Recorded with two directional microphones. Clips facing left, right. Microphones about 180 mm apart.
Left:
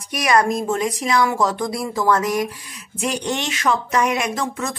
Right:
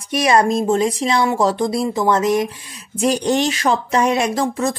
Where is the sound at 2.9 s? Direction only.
35° right (ahead or behind).